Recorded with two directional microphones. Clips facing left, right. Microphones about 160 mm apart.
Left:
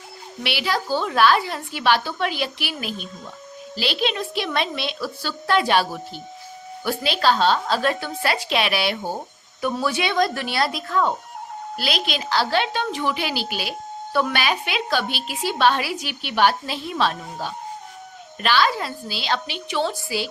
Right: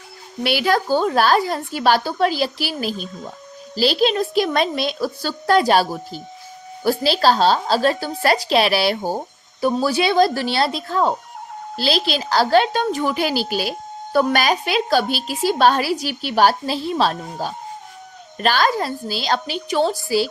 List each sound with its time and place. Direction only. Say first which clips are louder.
0.4 s a woman's voice: right 6 dB; 45° right (ahead or behind)